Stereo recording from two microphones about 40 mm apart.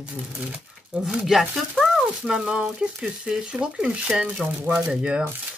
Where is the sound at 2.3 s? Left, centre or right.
Right.